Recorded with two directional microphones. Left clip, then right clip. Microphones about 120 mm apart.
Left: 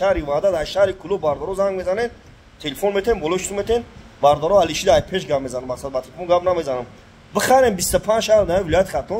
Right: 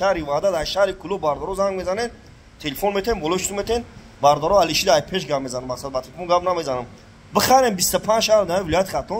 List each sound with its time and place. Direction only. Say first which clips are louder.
0.0 s a man's voice: left 2 dB; 15° left (ahead or behind)